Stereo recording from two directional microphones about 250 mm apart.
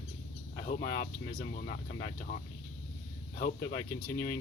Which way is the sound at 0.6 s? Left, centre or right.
Left.